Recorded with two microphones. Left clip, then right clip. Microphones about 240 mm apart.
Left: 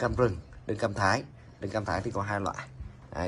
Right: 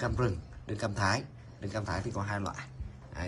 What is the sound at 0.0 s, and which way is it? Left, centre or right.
A man's voice, centre.